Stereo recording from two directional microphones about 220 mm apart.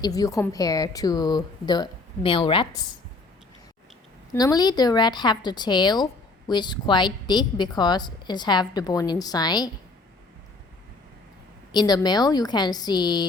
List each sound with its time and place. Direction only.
0.0 s a woman's voice: 15° left (ahead or behind)
4.4 s a woman's voice: 15° left (ahead or behind)
11.7 s a woman's voice: 20° left (ahead or behind)